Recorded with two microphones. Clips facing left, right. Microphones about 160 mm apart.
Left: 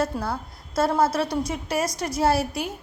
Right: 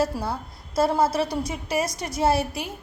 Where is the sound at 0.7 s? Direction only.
30° right (ahead or behind).